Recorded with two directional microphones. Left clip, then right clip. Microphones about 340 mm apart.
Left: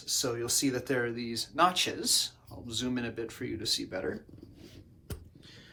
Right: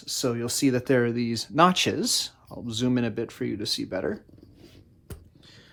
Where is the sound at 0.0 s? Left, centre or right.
Right.